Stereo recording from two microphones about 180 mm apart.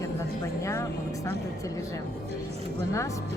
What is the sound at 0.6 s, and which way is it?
Speech, 15° left (ahead or behind).